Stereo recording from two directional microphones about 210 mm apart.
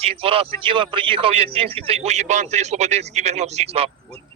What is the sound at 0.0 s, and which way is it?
A man's voice, 25° right (ahead or behind).